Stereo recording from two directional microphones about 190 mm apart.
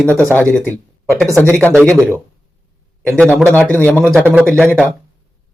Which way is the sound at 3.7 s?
10° left (ahead or behind).